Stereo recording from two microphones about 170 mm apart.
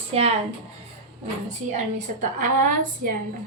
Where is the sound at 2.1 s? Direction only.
45° right (ahead or behind).